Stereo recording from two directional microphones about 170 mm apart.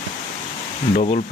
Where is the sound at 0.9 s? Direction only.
45° left (ahead or behind).